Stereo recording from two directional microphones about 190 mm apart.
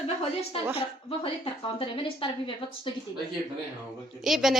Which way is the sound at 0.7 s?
30° left (ahead or behind).